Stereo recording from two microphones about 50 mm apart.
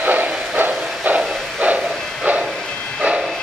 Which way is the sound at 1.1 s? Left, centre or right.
Right.